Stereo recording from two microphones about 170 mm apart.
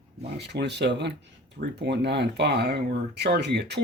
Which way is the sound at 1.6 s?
75° right (ahead or behind).